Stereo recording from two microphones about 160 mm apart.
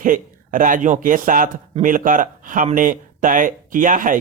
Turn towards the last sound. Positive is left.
turn(degrees=-55)  # may be behind; listen again after turning